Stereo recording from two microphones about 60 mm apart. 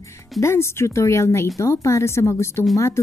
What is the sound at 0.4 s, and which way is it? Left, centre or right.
A woman's voice, left.